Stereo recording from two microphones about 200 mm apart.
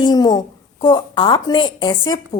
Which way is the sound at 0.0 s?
20° left (ahead or behind).